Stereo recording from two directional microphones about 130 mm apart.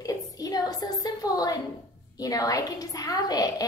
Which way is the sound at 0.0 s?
30° left (ahead or behind).